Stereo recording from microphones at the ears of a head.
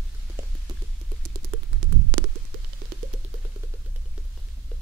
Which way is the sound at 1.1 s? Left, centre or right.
Right.